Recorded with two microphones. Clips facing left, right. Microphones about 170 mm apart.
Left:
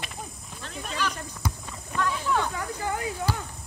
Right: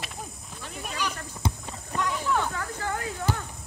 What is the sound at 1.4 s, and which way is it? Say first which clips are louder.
Clip-clop: right 3 dB; 25° right (ahead or behind).